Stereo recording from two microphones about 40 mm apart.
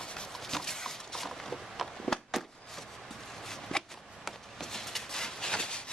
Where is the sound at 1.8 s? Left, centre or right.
Centre.